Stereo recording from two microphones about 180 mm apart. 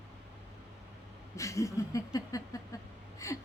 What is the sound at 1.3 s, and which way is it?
A woman's voice, 15° left (ahead or behind).